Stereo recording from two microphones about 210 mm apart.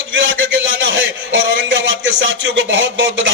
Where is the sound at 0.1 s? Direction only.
65° right (ahead or behind).